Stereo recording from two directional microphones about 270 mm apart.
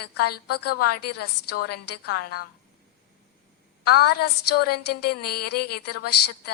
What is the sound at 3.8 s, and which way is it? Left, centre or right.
A woman's voice, left.